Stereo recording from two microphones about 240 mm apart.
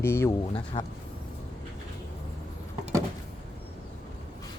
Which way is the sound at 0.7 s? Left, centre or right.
Left.